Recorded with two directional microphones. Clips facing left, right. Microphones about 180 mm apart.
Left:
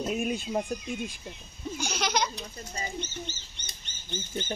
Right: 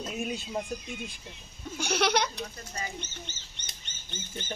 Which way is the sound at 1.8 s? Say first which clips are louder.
Right 4 dB; 65° right (ahead or behind).